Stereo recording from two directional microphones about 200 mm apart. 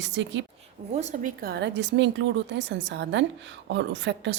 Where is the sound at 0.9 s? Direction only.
35° right (ahead or behind).